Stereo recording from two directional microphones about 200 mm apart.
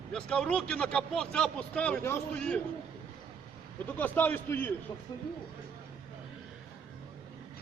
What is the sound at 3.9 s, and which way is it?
Speech, 10° left (ahead or behind).